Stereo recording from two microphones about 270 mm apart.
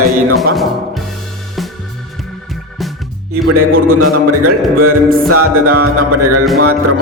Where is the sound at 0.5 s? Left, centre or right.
Centre.